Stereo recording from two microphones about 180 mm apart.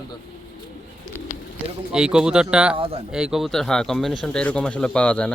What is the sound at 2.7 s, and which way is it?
Speech, 30° right (ahead or behind).